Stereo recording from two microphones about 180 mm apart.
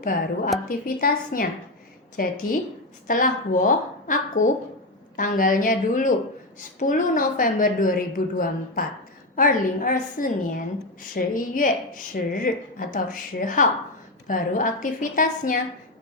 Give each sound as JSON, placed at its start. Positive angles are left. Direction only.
{"t": 0.0, "sound": "a woman's voice", "side_deg": 50}